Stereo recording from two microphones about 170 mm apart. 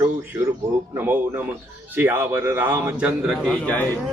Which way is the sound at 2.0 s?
15° right (ahead or behind).